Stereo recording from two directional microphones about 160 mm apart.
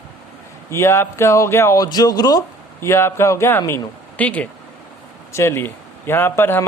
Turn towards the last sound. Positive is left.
turn(degrees=15)  # may be behind; listen again after turning